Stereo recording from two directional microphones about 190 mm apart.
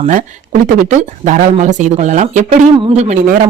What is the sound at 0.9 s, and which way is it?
Speech, 40° right (ahead or behind).